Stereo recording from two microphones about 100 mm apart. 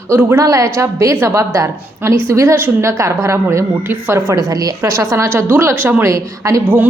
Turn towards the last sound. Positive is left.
turn(degrees=-30)  # may be behind; listen again after turning